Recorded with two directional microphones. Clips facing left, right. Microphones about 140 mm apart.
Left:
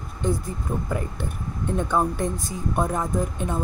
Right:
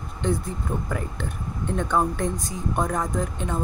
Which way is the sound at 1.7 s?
10° left (ahead or behind).